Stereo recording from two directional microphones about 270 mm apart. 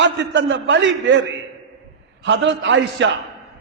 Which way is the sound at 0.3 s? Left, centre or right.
Right.